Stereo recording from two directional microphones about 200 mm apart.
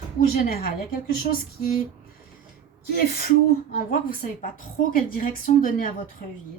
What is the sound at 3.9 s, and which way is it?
A woman's voice, 45° left (ahead or behind).